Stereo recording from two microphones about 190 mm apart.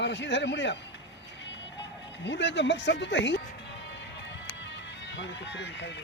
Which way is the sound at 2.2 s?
70° left (ahead or behind).